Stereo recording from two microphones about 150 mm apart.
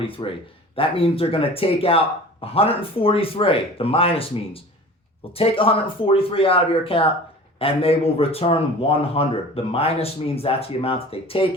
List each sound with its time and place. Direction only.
0.0 s speech: 35° left (ahead or behind)